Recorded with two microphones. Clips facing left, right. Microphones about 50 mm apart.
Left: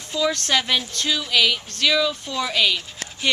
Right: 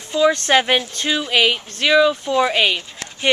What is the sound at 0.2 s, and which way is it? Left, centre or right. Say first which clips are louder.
Speech: right 7 dB; right.